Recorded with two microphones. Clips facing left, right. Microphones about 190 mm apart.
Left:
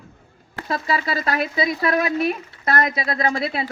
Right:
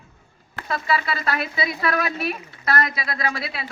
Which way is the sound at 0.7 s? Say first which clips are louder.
Left 1 dB; 35° left (ahead or behind).